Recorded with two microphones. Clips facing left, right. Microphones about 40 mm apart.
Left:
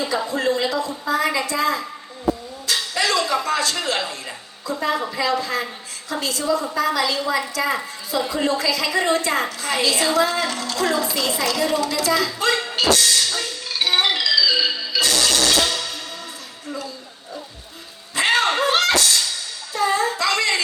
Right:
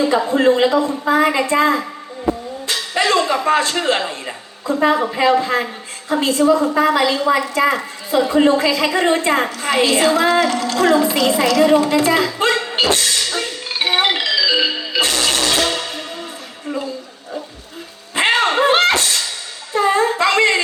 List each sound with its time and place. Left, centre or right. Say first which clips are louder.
0.0 s a woman's voice: right 8 dB; right
18.1 s music: right 3 dB; right
19.7 s a sound: right 5 dB; right